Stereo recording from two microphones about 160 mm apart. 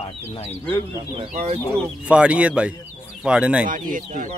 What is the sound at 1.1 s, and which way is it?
Speech, 35° right (ahead or behind).